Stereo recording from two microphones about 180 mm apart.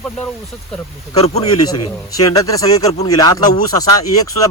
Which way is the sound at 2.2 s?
20° left (ahead or behind).